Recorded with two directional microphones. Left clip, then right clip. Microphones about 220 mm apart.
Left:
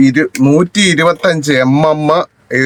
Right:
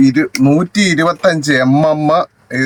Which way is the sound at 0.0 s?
5° left (ahead or behind).